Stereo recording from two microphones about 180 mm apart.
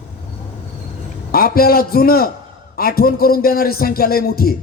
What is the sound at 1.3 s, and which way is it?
A man's voice, 55° left (ahead or behind).